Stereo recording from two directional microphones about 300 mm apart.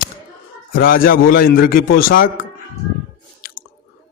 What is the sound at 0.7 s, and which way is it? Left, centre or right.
A man's voice, left.